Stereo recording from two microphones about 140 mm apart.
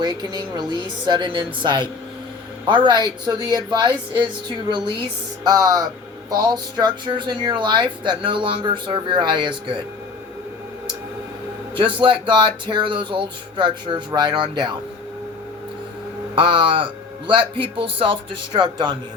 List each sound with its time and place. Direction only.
0.0 s speech: 30° right (ahead or behind)
11.7 s speech: 35° right (ahead or behind)
16.3 s speech: 35° right (ahead or behind)